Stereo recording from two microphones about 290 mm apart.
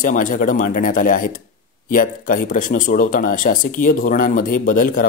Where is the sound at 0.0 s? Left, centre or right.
Left.